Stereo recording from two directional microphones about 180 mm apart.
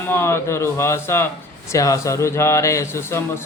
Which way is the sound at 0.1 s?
15° left (ahead or behind).